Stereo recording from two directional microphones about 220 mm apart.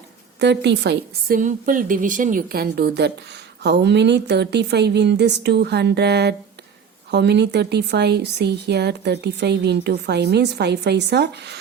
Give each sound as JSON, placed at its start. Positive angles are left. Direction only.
{"t": 0.3, "sound": "a woman's voice", "side_deg": -50}
{"t": 1.4, "sound": "a woman's voice", "side_deg": -35}